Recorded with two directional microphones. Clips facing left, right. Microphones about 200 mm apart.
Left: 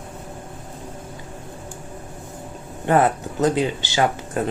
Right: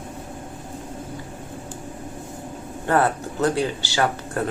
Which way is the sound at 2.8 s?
20° left (ahead or behind).